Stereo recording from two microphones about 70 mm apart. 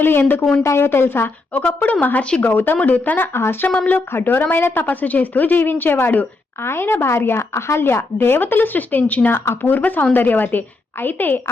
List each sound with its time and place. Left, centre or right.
0.0 s a woman's voice: left
3.3 s speech: left
3.8 s a woman's voice: left
4.1 s a woman's voice: left
9.3 s speech: left
9.7 s a woman's voice: left